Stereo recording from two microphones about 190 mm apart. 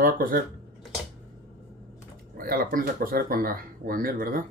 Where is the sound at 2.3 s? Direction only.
50° right (ahead or behind).